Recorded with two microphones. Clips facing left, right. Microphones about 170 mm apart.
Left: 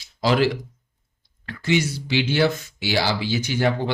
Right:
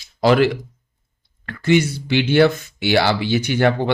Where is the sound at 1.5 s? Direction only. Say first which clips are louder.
Right 5 dB; 55° right (ahead or behind).